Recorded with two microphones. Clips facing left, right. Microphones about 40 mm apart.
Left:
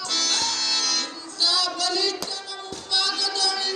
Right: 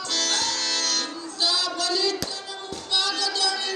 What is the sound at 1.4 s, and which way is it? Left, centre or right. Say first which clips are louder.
Child singing: left 1 dB; right.